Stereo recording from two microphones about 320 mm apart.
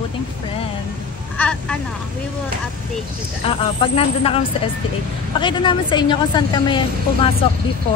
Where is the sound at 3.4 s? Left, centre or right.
Centre.